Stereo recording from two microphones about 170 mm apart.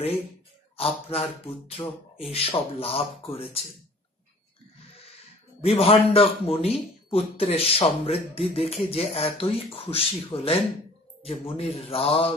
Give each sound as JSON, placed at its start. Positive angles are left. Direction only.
{"t": 0.7, "sound": "a man's voice", "side_deg": 35}
{"t": 5.6, "sound": "a man's voice", "side_deg": 35}